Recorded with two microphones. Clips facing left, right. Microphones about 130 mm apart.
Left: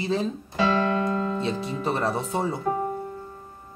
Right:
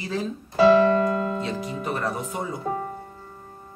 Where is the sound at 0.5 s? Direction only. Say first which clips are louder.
Right 8 dB; 35° right (ahead or behind).